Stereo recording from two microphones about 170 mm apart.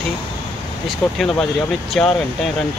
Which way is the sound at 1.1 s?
Centre (ahead or behind).